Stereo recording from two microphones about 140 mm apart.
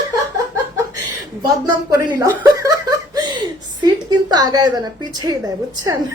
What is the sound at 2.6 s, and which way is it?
Speech, 30° right (ahead or behind).